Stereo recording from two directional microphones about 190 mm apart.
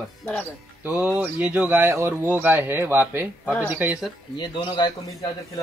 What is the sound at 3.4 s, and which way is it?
Speech, 10° left (ahead or behind).